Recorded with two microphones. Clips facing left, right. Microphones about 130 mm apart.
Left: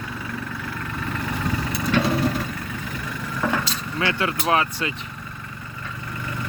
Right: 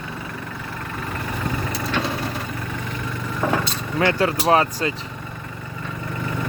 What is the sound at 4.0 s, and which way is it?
Speech, 40° right (ahead or behind).